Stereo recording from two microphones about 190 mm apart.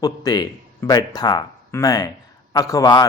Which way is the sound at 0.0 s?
20° left (ahead or behind).